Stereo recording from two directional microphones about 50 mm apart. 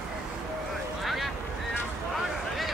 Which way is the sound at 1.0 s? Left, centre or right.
Centre.